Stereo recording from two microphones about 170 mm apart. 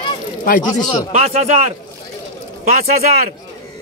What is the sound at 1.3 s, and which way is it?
Speech, 50° right (ahead or behind).